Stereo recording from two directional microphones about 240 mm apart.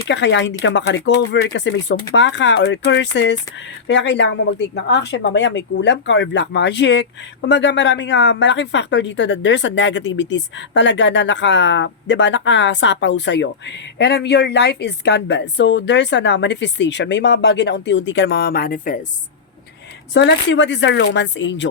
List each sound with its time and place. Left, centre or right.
0.1 s speech: left
20.1 s speech: left